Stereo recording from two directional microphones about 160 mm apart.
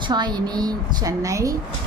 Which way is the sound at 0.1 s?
25° right (ahead or behind).